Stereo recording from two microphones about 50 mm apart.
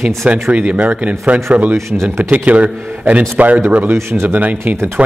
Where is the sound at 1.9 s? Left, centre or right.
Right.